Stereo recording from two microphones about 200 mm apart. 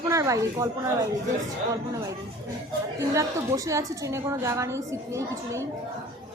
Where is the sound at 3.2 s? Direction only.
15° right (ahead or behind).